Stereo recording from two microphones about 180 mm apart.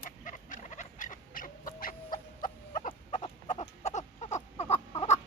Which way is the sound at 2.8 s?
40° left (ahead or behind).